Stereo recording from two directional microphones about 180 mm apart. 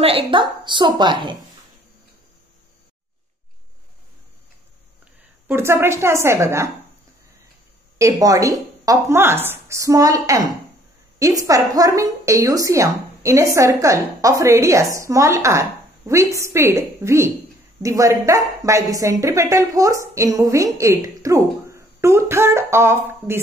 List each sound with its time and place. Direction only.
0.0 s speech: 30° right (ahead or behind)
5.0 s a woman's voice: 15° right (ahead or behind)
8.0 s a woman's voice: 20° right (ahead or behind)